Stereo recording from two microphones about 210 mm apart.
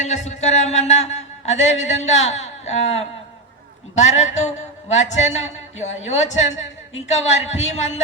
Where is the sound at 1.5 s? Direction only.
65° left (ahead or behind).